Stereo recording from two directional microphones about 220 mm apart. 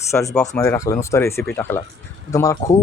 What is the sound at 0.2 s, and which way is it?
Speech, 5° left (ahead or behind).